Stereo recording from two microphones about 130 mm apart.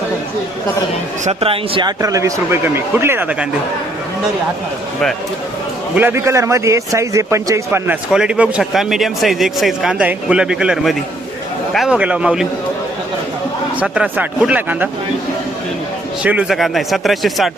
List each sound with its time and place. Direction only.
1.2 s speech: 50° right (ahead or behind)
2.0 s speech: 25° right (ahead or behind)
5.9 s a man's voice: 15° right (ahead or behind)
13.7 s a man's voice: 5° right (ahead or behind)
16.2 s speech: 10° right (ahead or behind)